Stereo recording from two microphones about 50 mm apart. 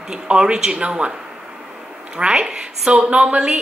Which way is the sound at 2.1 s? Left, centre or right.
Right.